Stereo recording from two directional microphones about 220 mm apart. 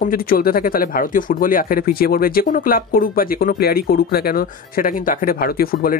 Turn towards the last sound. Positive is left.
turn(degrees=40)  # may be behind; listen again after turning